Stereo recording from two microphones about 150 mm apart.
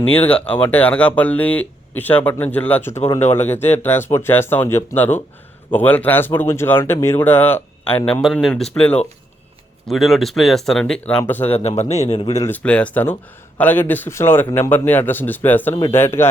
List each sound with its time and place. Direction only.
0.3 s speech: 10° left (ahead or behind)
8.2 s speech: centre (ahead or behind)
11.4 s speech: 45° left (ahead or behind)
12.4 s speech: 10° left (ahead or behind)